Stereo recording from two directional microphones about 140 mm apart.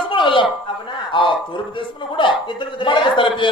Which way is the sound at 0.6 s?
35° left (ahead or behind).